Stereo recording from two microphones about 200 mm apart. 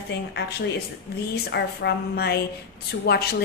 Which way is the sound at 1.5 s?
55° left (ahead or behind).